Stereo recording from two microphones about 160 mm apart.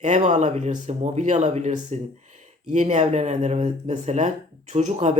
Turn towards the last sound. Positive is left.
turn(degrees=-45)  # may be behind; listen again after turning